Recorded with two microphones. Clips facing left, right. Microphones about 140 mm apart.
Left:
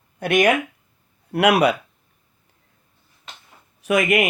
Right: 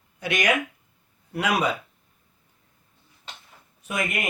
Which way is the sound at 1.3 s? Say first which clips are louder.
Left 8 dB; 65° left (ahead or behind).